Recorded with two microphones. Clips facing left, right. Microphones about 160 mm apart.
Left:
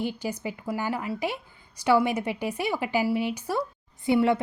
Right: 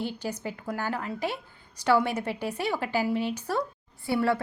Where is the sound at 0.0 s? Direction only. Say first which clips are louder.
Left 2 dB; 10° left (ahead or behind).